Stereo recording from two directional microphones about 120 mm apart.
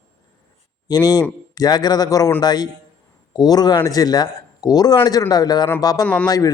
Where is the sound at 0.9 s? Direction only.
35° left (ahead or behind).